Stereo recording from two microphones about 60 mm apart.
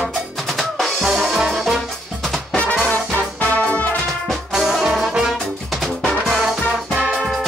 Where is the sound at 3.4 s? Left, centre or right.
Left.